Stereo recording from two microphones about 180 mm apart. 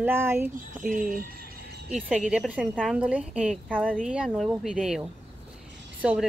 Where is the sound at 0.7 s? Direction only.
50° right (ahead or behind).